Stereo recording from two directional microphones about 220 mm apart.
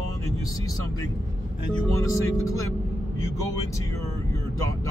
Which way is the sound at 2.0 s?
15° left (ahead or behind).